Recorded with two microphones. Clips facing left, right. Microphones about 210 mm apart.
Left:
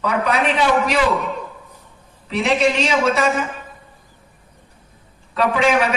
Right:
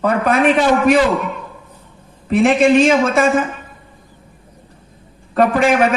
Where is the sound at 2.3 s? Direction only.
50° right (ahead or behind).